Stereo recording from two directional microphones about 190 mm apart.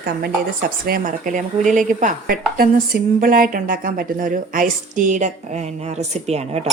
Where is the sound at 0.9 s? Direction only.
45° right (ahead or behind).